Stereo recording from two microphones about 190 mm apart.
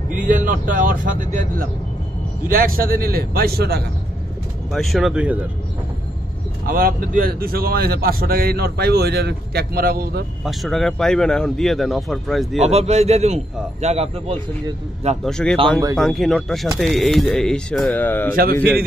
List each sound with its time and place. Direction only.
0.1 s a man's voice: 45° right (ahead or behind)
4.7 s speech: centre (ahead or behind)
6.6 s a man's voice: 50° right (ahead or behind)
10.4 s speech: centre (ahead or behind)
12.6 s speech: 35° right (ahead or behind)
15.2 s speech: 5° left (ahead or behind)
18.3 s a man's voice: 50° right (ahead or behind)